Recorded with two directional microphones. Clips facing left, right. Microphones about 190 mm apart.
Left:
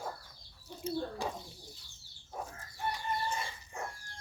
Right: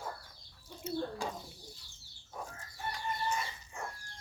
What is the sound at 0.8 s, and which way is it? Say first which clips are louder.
Bird: left 2 dB; 35° left (ahead or behind).